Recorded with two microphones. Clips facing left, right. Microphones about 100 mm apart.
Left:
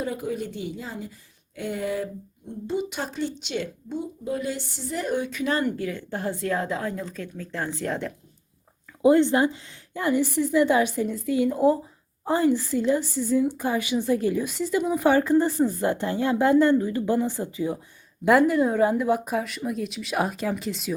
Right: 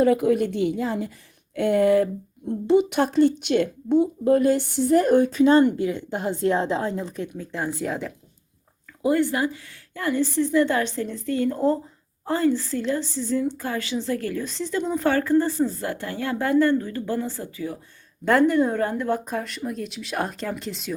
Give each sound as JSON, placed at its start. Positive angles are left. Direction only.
{"t": 0.0, "sound": "a woman's voice", "side_deg": -65}
{"t": 5.3, "sound": "a woman's voice", "side_deg": -30}
{"t": 7.9, "sound": "speech", "side_deg": 0}
{"t": 9.0, "sound": "a woman's voice", "side_deg": 20}
{"t": 18.3, "sound": "speech", "side_deg": 5}